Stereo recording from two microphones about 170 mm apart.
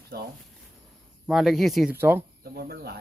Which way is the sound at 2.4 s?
65° right (ahead or behind).